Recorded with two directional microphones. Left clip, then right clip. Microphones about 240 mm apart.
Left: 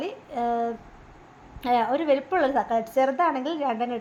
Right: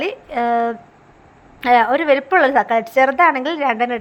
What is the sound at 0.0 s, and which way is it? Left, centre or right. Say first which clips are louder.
A woman's voice: right 8 dB; centre.